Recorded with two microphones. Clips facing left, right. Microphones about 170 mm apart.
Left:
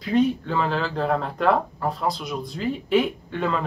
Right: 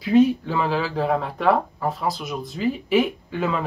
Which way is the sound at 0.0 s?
5° right (ahead or behind).